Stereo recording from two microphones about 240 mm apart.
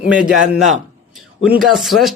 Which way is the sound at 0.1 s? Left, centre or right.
Centre.